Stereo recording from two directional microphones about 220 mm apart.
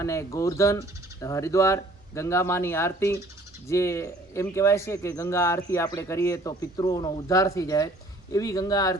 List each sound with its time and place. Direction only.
0.0 s speech: 15° left (ahead or behind)